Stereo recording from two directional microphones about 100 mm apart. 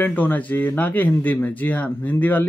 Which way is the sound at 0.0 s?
15° left (ahead or behind).